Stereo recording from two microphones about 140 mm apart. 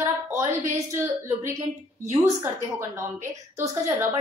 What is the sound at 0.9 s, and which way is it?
Speech, 15° right (ahead or behind).